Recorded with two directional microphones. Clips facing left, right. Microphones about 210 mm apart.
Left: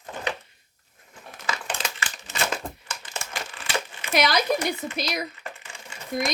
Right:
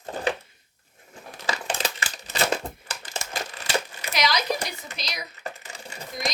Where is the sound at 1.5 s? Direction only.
35° right (ahead or behind).